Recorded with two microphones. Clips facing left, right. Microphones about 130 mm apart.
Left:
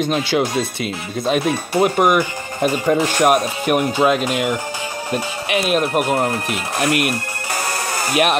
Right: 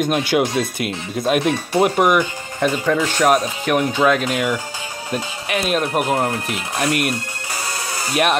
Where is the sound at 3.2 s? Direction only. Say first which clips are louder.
Even; 25° left (ahead or behind).